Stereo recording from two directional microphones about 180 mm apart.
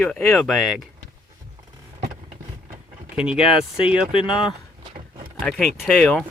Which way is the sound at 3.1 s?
5° right (ahead or behind).